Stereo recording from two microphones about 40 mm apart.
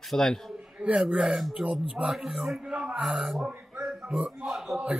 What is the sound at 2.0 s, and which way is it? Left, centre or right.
Speech, right.